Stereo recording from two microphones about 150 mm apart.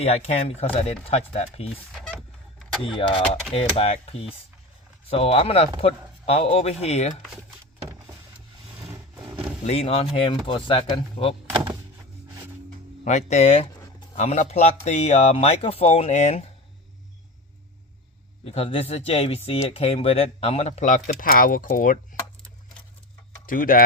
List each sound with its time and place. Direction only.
0.0 s speech: 45° left (ahead or behind)
1.9 s vehicle: centre (ahead or behind)
2.8 s speech: 35° left (ahead or behind)
9.6 s speech: 40° left (ahead or behind)
13.1 s speech: 50° left (ahead or behind)
18.4 s speech: 40° left (ahead or behind); by 21.9 s 65° left (ahead or behind)
23.5 s speech: 70° left (ahead or behind)